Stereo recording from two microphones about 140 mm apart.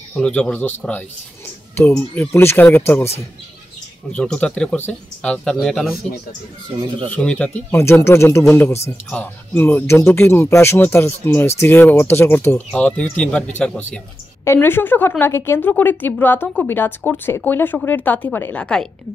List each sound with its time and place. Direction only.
0.1 s a woman's voice: 10° left (ahead or behind)
4.1 s speech: 5° left (ahead or behind)
6.7 s speech: 40° right (ahead or behind)
7.1 s a woman's voice: 10° left (ahead or behind)